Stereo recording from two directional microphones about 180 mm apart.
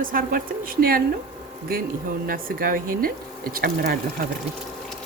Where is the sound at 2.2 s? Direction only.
50° right (ahead or behind).